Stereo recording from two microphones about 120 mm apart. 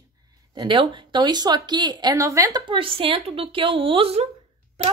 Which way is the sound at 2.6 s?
45° right (ahead or behind).